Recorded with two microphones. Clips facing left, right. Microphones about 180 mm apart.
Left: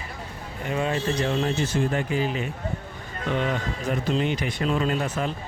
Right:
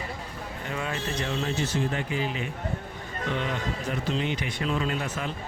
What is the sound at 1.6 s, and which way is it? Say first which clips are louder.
Speech: left 4 dB; 50° left (ahead or behind).